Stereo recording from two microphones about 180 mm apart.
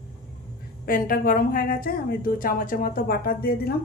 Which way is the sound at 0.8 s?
50° left (ahead or behind).